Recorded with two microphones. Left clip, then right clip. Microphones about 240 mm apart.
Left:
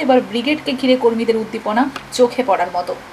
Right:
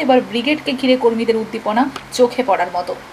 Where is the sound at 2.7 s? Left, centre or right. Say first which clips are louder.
Even; centre.